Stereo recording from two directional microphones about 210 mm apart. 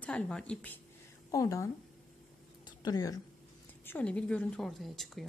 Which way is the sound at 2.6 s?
20° left (ahead or behind).